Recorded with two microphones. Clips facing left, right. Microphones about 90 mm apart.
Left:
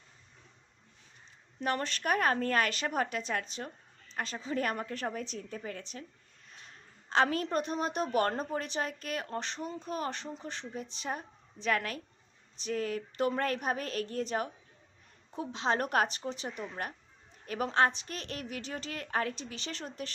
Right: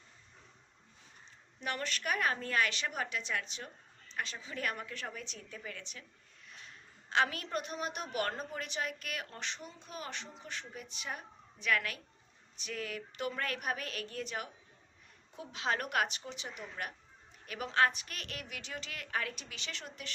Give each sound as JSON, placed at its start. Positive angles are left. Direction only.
{"t": 1.6, "sound": "a woman's voice", "side_deg": 35}